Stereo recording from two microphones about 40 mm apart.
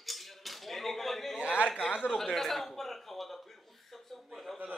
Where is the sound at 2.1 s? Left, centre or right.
Centre.